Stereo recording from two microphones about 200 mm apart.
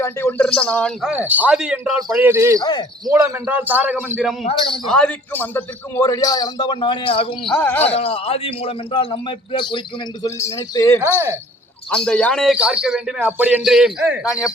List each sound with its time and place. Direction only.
0.0 s a man's voice: 10° left (ahead or behind)
1.1 s a man's voice: 10° right (ahead or behind)
2.6 s a man's voice: 20° left (ahead or behind)
3.1 s a man's voice: 15° right (ahead or behind)
4.9 s a man's voice: 5° left (ahead or behind); by 7.3 s 25° left (ahead or behind)
7.5 s a man's voice: 10° left (ahead or behind)
7.9 s a man's voice: 30° left (ahead or behind)
11.9 s a man's voice: 5° left (ahead or behind)